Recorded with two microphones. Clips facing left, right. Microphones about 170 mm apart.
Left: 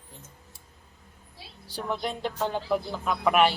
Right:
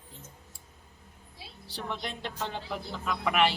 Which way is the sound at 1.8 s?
45° left (ahead or behind).